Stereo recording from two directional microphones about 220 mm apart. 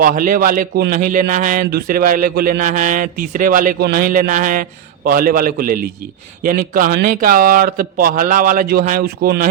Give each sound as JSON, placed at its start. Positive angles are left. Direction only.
{"t": 0.0, "sound": "a man's voice", "side_deg": -40}